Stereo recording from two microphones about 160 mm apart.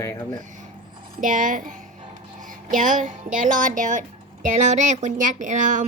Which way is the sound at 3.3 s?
55° right (ahead or behind).